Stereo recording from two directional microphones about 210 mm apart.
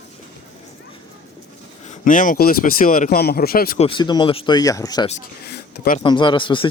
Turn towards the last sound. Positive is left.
turn(degrees=25)  # may be behind; listen again after turning